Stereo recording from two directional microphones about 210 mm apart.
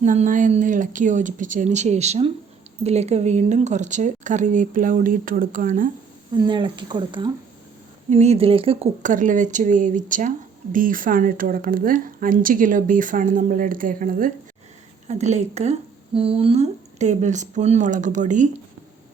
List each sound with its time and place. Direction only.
0.0 s speech: 35° right (ahead or behind)
6.3 s speech: 20° right (ahead or behind)